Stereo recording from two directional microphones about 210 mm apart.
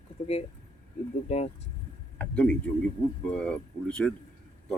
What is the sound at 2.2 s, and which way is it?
Speech, 5° left (ahead or behind).